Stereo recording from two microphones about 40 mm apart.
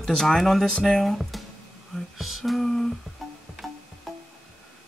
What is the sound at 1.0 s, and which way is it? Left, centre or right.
Speech, centre.